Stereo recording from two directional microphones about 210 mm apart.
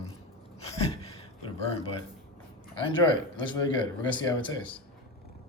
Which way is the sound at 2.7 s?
25° left (ahead or behind).